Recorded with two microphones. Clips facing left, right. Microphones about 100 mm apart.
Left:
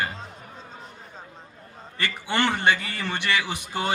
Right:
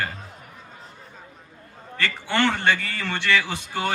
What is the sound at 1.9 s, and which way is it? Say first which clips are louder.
A man's voice: right 2 dB; 20° left (ahead or behind).